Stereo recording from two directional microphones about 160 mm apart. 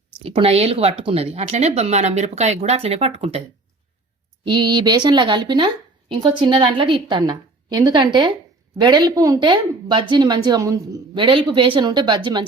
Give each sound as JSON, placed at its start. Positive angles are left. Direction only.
{"t": 0.2, "sound": "speech", "side_deg": -40}
{"t": 4.4, "sound": "a woman's voice", "side_deg": -30}
{"t": 11.2, "sound": "a woman's voice", "side_deg": -30}